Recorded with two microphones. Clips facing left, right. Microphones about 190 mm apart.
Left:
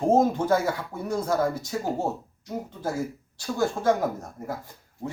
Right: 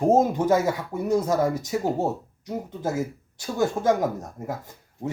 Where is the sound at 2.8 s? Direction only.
20° right (ahead or behind).